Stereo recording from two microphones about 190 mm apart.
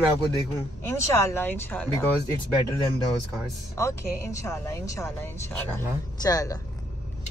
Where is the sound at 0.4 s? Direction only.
15° left (ahead or behind).